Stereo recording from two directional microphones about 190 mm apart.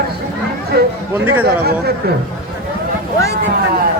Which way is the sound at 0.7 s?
55° right (ahead or behind).